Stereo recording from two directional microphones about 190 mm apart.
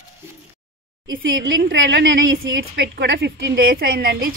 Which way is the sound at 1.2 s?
90° right.